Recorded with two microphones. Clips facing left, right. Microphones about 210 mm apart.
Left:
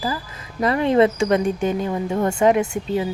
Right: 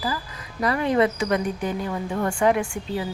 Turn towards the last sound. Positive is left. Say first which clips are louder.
# left 5 dB
turn(degrees=20)  # may be behind; listen again after turning